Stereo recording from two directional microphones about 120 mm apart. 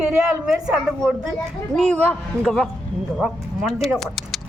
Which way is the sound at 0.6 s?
5° right (ahead or behind).